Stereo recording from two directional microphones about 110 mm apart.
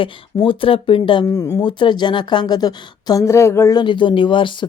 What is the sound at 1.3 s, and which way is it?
Speech, 25° left (ahead or behind).